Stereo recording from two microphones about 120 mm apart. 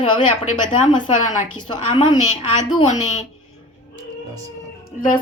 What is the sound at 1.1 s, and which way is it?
Speech, 90° left.